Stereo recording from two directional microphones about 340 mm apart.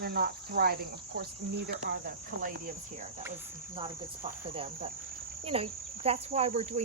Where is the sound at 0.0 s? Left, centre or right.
Right.